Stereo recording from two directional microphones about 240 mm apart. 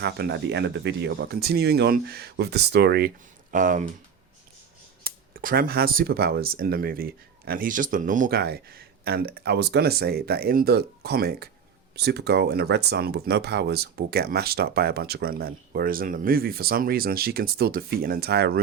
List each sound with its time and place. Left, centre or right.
0.0 s speech: right
3.5 s speech: right
5.0 s speech: right